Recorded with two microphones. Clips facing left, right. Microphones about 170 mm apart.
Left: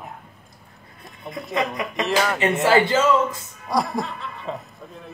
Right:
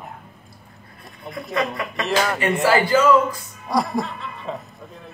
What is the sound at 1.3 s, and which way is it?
Speech, centre (ahead or behind).